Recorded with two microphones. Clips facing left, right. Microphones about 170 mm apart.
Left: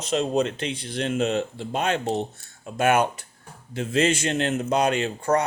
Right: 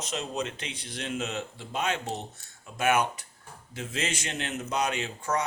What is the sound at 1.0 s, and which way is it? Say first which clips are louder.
Speech: left 9 dB; 55° left (ahead or behind).